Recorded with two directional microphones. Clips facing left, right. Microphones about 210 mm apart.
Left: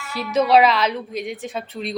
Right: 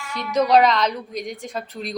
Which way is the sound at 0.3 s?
5° left (ahead or behind).